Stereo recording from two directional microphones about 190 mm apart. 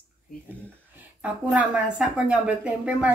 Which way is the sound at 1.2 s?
5° right (ahead or behind).